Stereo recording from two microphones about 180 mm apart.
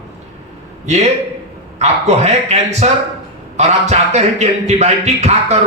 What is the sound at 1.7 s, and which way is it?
A man's voice, 35° right (ahead or behind).